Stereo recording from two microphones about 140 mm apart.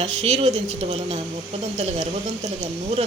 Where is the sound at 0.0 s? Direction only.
50° right (ahead or behind).